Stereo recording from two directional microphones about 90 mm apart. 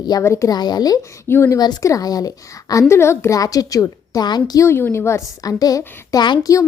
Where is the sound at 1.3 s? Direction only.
30° left (ahead or behind).